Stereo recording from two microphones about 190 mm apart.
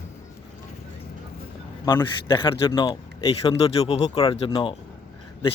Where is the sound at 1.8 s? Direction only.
20° left (ahead or behind).